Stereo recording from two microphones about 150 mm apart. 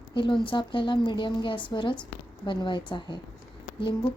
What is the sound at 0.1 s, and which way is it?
Speech, 30° left (ahead or behind).